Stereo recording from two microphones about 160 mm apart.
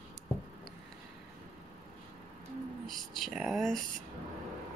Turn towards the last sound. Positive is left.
turn(degrees=0)  # may be behind; listen again after turning